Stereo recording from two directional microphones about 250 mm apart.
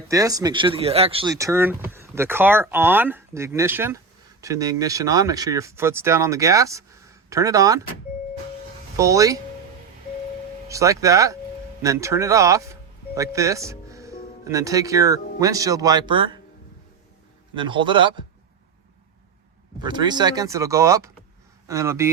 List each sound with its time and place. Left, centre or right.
0.1 s speech: centre
9.0 s speech: centre
10.7 s speech: centre
17.5 s a man's voice: centre
19.8 s speech: centre